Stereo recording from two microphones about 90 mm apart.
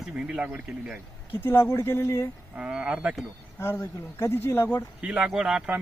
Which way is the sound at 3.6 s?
30° left (ahead or behind).